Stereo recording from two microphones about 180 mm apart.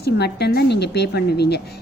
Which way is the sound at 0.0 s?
65° left (ahead or behind).